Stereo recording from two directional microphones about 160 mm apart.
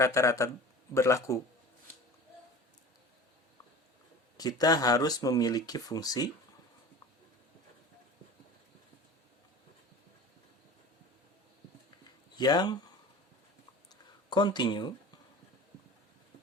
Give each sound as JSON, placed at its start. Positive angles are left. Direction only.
{"t": 0.0, "sound": "speech", "side_deg": 20}
{"t": 4.4, "sound": "speech", "side_deg": 25}
{"t": 12.4, "sound": "speech", "side_deg": 25}
{"t": 14.3, "sound": "speech", "side_deg": 25}